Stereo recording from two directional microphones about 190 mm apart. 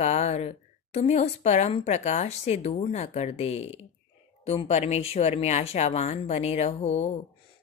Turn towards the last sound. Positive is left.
turn(degrees=35)  # may be behind; listen again after turning